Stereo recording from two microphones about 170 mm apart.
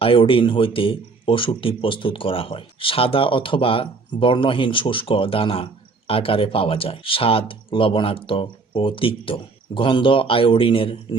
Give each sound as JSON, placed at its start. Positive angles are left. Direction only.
{"t": 0.0, "sound": "speech", "side_deg": 30}